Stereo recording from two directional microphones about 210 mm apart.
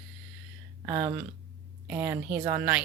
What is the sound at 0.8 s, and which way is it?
Speech, 15° right (ahead or behind).